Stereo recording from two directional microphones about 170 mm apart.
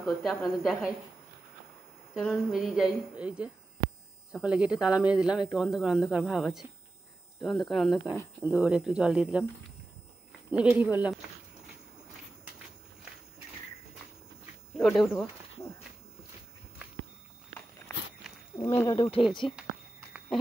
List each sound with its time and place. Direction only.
0.0 s speech: centre (ahead or behind)
2.1 s speech: 5° right (ahead or behind)
10.5 s speech: 5° right (ahead or behind)
14.8 s speech: centre (ahead or behind)
18.7 s speech: 15° left (ahead or behind)
18.9 s speech: 30° left (ahead or behind)